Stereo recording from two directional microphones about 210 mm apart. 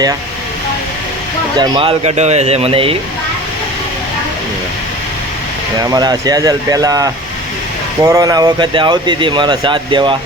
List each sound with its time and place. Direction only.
1.5 s speech: 25° right (ahead or behind)
5.8 s speech: 20° right (ahead or behind)